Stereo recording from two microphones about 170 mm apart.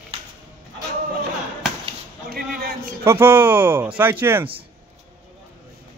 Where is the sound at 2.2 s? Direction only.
65° right (ahead or behind).